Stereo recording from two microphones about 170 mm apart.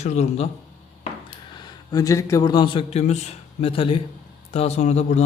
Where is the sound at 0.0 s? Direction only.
40° left (ahead or behind).